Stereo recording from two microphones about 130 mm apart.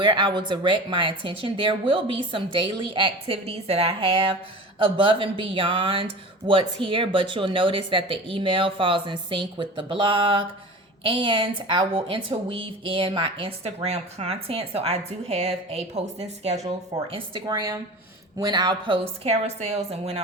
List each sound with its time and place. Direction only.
0.0 s a woman's voice: 35° right (ahead or behind)
19.2 s a woman's voice: 55° right (ahead or behind)